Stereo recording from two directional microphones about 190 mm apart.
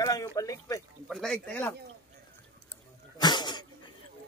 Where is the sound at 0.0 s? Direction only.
15° left (ahead or behind).